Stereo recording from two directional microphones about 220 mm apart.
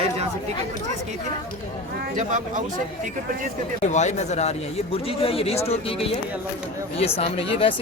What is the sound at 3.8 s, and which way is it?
Speech, 30° left (ahead or behind).